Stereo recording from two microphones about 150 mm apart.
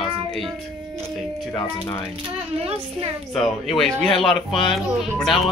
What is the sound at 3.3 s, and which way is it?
Speech, centre (ahead or behind).